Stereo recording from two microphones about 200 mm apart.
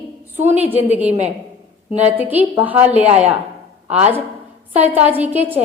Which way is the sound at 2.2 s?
10° right (ahead or behind).